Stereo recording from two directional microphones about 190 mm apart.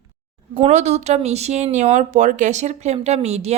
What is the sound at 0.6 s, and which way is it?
Speech, 35° right (ahead or behind).